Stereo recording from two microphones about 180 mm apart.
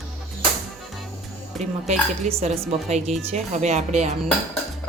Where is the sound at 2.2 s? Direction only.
35° right (ahead or behind).